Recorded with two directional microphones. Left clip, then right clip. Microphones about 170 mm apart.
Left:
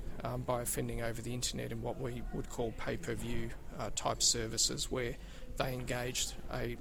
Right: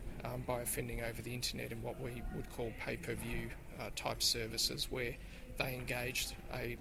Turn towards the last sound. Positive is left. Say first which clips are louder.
# left 3 dB
turn(degrees=45)  # may be behind; listen again after turning